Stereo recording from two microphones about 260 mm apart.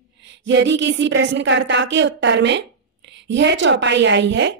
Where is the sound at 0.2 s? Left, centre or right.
Right.